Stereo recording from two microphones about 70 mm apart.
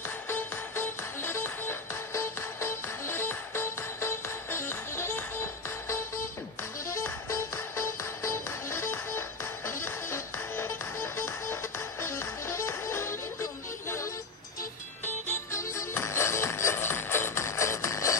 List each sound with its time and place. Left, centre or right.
0.3 s music: left
15.5 s music: left